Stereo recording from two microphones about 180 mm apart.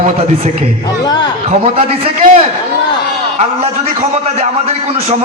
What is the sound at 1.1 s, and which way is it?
Speech, 25° left (ahead or behind).